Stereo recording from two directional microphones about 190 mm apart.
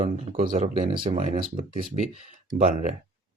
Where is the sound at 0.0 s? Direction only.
30° right (ahead or behind).